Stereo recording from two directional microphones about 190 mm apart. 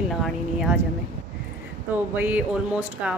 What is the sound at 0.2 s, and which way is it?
Speech, centre (ahead or behind).